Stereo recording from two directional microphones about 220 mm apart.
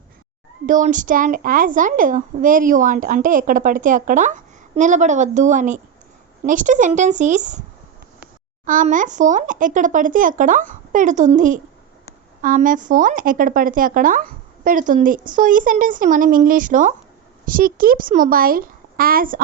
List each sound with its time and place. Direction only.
0.6 s a woman's voice: 35° right (ahead or behind)
8.6 s a woman's voice: 35° right (ahead or behind)